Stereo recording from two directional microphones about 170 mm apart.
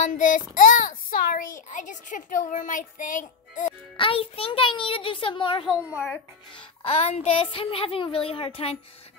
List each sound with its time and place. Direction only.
0.0 s a child's voice: 50° left (ahead or behind)
3.9 s a woman's voice: 30° left (ahead or behind)
5.8 s a child's voice: 5° right (ahead or behind)
6.5 s a woman's voice: 35° left (ahead or behind)